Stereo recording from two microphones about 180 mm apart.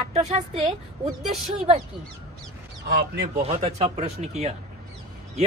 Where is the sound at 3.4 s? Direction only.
35° right (ahead or behind).